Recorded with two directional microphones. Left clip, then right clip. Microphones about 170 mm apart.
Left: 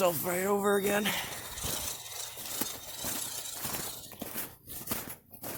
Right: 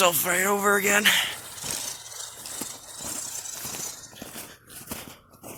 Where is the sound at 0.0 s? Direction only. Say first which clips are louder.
Right 7 dB; 5° left (ahead or behind).